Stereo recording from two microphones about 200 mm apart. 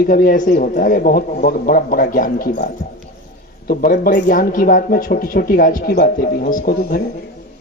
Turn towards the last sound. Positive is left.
turn(degrees=45)  # may be behind; listen again after turning